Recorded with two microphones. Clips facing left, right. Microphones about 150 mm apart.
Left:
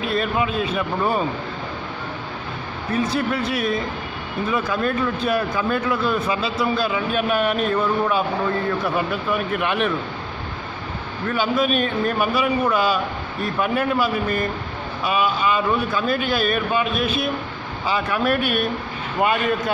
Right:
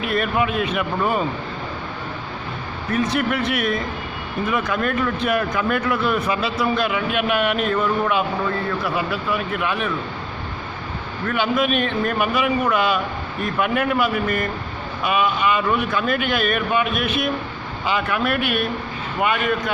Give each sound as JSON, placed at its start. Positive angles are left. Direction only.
{"t": 0.0, "sound": "speech", "side_deg": 25}
{"t": 3.2, "sound": "speech", "side_deg": 25}
{"t": 11.2, "sound": "a man's voice", "side_deg": 35}
{"t": 15.5, "sound": "a man's voice", "side_deg": 30}